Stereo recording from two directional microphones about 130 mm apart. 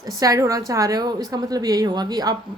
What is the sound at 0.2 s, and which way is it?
A woman's voice, 25° right (ahead or behind).